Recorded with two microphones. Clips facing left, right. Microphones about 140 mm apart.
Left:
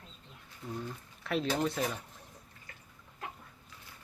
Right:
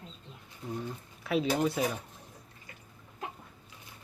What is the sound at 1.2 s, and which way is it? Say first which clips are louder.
Speech: right 3 dB; 5° right (ahead or behind).